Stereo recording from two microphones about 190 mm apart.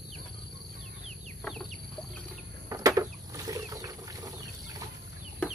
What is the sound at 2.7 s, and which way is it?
Chicken, 20° right (ahead or behind).